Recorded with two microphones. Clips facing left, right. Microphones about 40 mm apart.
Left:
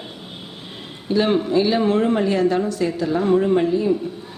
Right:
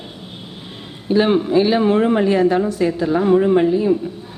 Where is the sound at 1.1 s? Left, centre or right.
Right.